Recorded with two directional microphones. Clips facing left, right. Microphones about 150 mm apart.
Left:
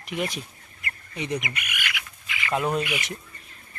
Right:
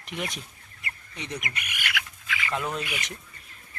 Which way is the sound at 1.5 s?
30° right (ahead or behind).